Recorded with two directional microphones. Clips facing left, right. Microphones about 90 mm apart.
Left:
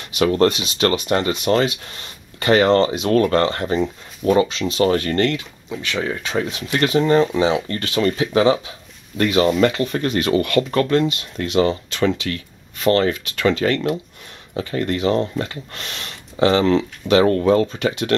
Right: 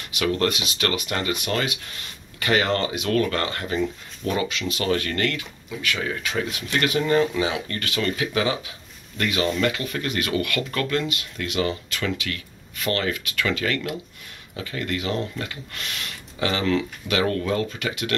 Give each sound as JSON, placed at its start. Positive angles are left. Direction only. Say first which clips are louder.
{"t": 0.2, "sound": "speech", "louder": "left 7 dB", "side_deg": 30}